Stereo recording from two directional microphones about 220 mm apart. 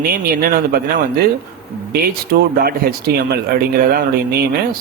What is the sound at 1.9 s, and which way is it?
Speech, 45° right (ahead or behind).